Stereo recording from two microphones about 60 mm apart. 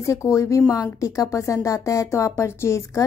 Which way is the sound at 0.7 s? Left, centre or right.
Left.